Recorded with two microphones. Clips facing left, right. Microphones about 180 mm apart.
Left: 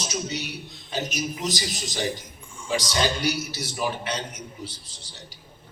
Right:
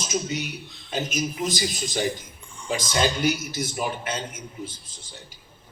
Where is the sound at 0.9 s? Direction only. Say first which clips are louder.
Right 2 dB; 50° right (ahead or behind).